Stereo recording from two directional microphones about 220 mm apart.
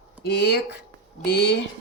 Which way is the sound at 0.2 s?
50° left (ahead or behind).